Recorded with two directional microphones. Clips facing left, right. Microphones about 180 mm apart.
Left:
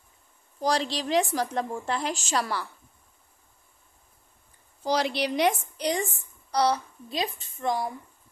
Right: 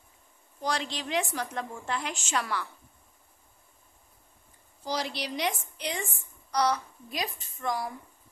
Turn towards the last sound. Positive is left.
turn(degrees=25)  # may be behind; listen again after turning